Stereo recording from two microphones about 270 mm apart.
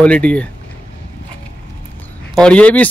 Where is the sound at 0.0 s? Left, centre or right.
Centre.